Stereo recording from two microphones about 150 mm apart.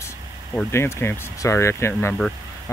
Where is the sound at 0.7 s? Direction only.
15° left (ahead or behind).